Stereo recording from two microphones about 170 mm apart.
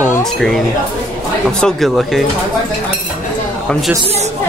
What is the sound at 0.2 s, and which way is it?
Speech, 5° left (ahead or behind).